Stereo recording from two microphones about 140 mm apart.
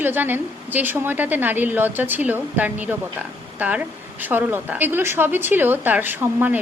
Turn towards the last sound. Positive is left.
turn(degrees=-15)  # may be behind; listen again after turning